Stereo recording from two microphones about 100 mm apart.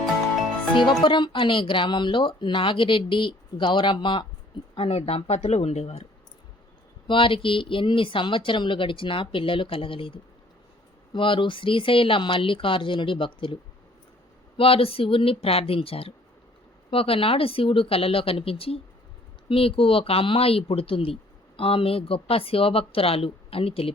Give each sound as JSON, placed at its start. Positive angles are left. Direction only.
{"t": 0.9, "sound": "speech", "side_deg": 50}
{"t": 4.7, "sound": "speech", "side_deg": 75}
{"t": 7.1, "sound": "speech", "side_deg": 60}
{"t": 14.5, "sound": "speech", "side_deg": 70}